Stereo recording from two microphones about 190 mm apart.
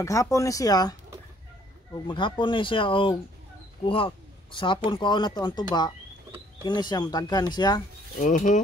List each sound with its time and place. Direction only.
0.0 s speech: 15° left (ahead or behind)
2.0 s speech: 25° left (ahead or behind)
8.2 s pulleys: 45° left (ahead or behind)